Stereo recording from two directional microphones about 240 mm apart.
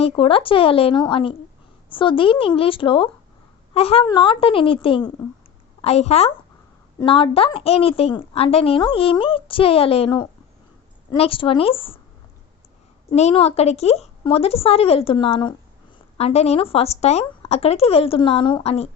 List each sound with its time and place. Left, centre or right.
0.0 s a woman's voice: left
13.1 s a woman's voice: left